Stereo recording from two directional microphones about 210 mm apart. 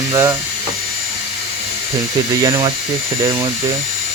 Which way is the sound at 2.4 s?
20° right (ahead or behind).